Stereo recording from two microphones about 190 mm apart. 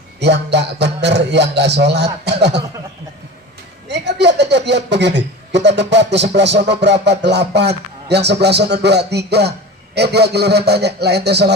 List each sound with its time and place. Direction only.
0.2 s a man's voice: 65° right (ahead or behind)
3.8 s a man's voice: 65° right (ahead or behind)